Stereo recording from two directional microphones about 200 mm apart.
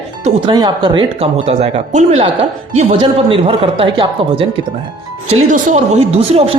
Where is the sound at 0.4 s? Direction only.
20° right (ahead or behind).